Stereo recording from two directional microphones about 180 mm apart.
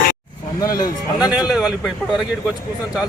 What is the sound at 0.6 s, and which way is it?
Speech, 20° left (ahead or behind).